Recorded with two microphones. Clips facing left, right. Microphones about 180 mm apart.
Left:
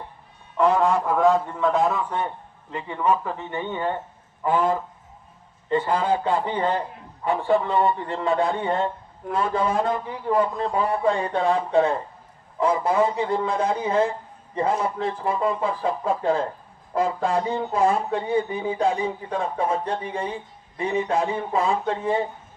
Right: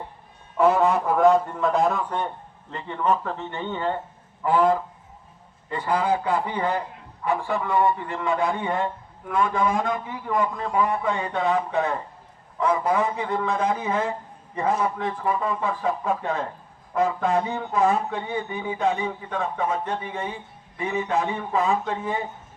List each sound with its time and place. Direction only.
0.5 s a man's voice: 5° right (ahead or behind); by 22.2 s 30° left (ahead or behind)